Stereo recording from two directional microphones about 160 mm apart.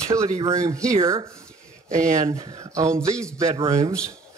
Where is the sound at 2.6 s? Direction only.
20° right (ahead or behind).